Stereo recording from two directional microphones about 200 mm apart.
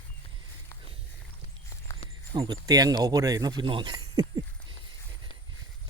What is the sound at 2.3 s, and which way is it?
Speech, 20° right (ahead or behind).